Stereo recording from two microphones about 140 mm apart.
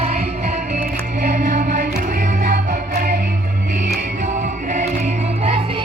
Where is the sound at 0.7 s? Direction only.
80° right.